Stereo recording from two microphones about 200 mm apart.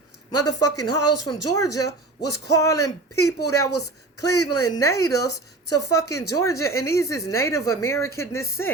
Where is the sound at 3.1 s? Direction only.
90° left.